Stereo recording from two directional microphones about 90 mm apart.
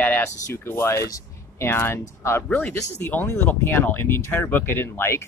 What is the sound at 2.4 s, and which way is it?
Speech, 15° left (ahead or behind).